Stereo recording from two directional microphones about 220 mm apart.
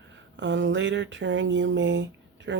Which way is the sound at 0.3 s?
55° right (ahead or behind).